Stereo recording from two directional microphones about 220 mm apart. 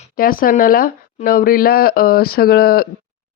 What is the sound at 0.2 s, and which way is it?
Speech, 40° left (ahead or behind).